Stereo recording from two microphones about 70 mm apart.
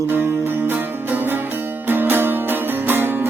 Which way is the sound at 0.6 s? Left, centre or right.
Right.